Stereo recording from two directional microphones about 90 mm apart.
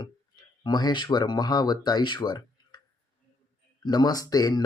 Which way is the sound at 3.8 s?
50° left (ahead or behind).